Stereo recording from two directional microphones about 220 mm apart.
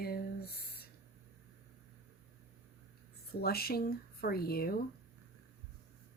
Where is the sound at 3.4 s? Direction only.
45° left (ahead or behind).